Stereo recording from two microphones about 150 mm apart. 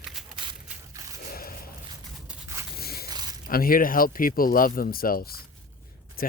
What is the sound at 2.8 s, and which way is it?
Biting, 90° left.